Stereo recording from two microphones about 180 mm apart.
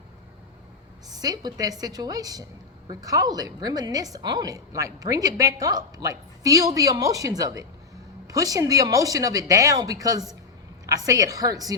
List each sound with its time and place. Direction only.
1.1 s a woman's voice: 20° right (ahead or behind)